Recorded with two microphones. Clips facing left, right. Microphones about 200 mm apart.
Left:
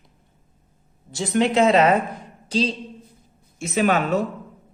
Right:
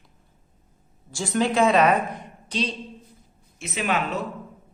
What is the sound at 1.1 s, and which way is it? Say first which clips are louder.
A man's voice: left 3 dB; 20° left (ahead or behind).